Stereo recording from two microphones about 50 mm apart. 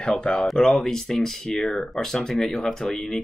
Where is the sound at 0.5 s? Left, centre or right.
Centre.